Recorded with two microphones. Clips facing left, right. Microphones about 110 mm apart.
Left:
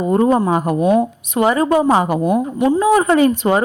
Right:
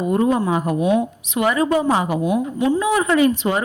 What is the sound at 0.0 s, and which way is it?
A woman's voice, 35° left (ahead or behind).